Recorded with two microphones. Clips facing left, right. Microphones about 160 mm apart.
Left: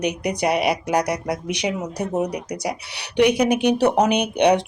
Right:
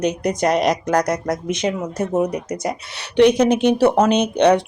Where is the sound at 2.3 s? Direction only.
10° left (ahead or behind).